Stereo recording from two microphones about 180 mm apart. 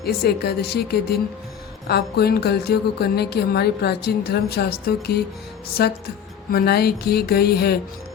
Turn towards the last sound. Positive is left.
turn(degrees=60)  # may be behind; listen again after turning